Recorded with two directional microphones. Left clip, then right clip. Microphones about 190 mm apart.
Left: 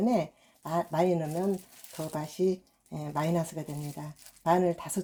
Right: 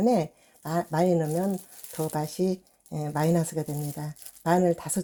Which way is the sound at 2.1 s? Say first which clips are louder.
Left 1 dB; 55° right (ahead or behind).